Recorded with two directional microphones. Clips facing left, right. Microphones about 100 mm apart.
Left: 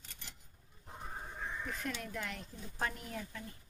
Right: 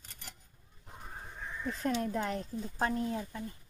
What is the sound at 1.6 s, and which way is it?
Speech, 35° right (ahead or behind).